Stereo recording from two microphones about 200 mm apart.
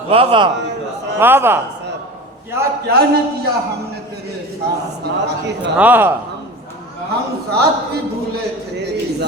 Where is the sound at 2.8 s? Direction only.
50° right (ahead or behind).